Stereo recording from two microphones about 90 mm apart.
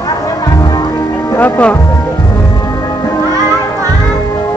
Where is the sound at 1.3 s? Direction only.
20° left (ahead or behind).